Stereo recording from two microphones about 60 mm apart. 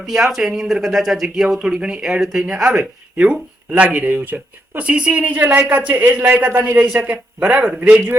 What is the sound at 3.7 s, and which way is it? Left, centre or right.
Speech, right.